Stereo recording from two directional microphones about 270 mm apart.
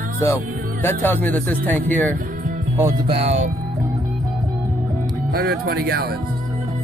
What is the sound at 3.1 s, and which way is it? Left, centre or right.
Speech, right.